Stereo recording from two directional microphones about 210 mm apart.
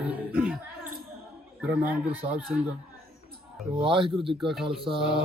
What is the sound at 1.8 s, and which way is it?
Speech, 10° right (ahead or behind).